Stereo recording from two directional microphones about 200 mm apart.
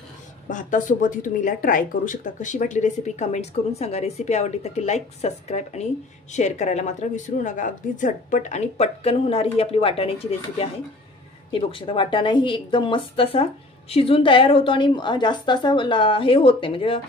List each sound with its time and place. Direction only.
0.5 s speech: 40° left (ahead or behind)